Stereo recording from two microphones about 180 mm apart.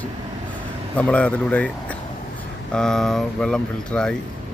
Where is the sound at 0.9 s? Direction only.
5° left (ahead or behind).